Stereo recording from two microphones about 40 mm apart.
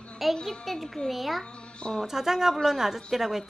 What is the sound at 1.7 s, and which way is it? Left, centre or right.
Speech, left.